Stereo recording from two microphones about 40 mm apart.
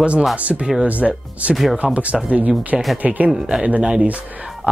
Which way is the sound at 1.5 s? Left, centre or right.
Centre.